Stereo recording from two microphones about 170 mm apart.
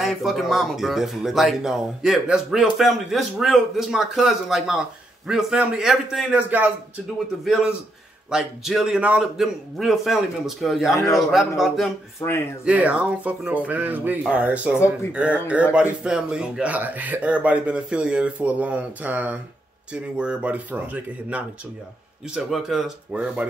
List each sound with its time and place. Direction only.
0.0 s speech: centre (ahead or behind)
12.2 s speech: 15° left (ahead or behind)
12.6 s speech: 5° right (ahead or behind)